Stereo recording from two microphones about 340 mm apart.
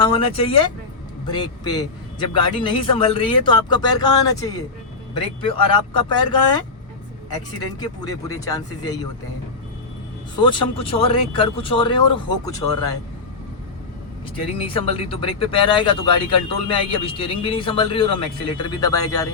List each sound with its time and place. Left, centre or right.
0.0 s a man's voice: centre
7.8 s a man's voice: centre
10.3 s a man's voice: centre
14.6 s a man's voice: centre